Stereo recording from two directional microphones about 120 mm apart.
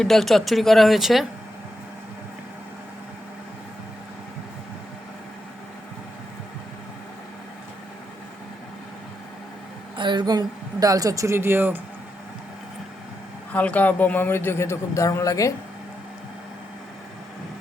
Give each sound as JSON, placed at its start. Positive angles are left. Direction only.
{"t": 0.0, "sound": "speech", "side_deg": 0}
{"t": 10.0, "sound": "a woman's voice", "side_deg": -40}
{"t": 13.5, "sound": "speech", "side_deg": 10}